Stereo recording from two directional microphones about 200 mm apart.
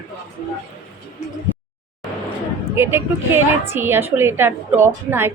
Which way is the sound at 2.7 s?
10° right (ahead or behind).